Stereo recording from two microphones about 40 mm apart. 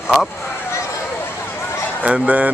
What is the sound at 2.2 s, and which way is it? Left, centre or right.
Speech, right.